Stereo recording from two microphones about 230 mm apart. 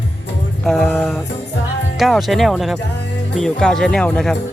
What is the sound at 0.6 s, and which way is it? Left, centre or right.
Speech, centre.